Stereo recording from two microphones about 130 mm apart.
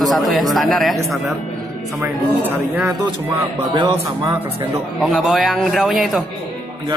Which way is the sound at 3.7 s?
35° right (ahead or behind).